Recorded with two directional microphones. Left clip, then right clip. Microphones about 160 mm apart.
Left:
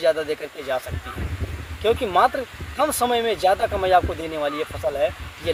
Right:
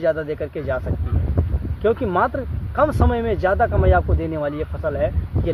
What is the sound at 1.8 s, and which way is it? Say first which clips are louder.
Speech: left 1 dB; 5° right (ahead or behind).